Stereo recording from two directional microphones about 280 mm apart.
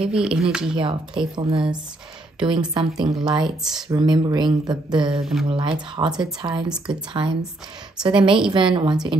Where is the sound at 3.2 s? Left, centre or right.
Centre.